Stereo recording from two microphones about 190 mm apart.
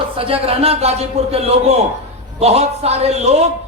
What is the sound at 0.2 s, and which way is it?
A man's voice, 30° right (ahead or behind).